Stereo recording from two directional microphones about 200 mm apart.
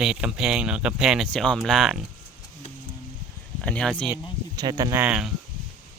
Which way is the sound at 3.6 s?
5° left (ahead or behind).